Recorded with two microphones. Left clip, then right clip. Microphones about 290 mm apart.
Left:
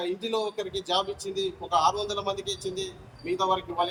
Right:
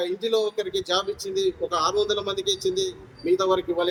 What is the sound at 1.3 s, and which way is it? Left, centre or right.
A man's voice, centre.